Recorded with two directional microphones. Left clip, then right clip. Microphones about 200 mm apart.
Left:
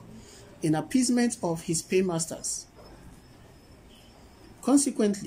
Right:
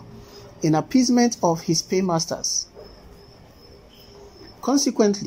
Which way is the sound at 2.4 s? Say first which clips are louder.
Right 11 dB; 25° left (ahead or behind).